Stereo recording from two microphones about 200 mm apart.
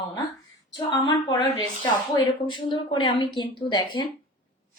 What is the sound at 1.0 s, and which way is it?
Speech, 20° left (ahead or behind).